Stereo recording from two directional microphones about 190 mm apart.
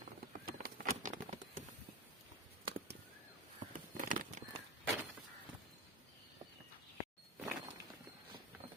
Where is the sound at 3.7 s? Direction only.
45° right (ahead or behind).